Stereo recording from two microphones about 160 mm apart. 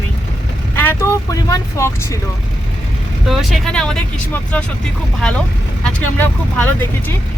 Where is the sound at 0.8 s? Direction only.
15° left (ahead or behind).